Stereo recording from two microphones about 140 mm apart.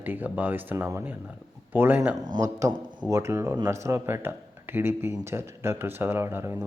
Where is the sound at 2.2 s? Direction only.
25° right (ahead or behind).